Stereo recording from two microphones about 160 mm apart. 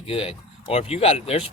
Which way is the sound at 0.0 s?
35° left (ahead or behind).